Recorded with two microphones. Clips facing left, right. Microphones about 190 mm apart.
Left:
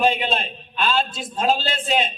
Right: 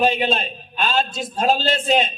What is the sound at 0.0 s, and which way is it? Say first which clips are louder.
A man's voice: right 2 dB; 45° right (ahead or behind).